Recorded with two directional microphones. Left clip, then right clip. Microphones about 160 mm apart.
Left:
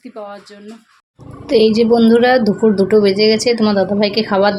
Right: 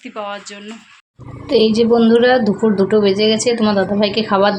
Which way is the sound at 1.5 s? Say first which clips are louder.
Left 1 dB; 10° left (ahead or behind).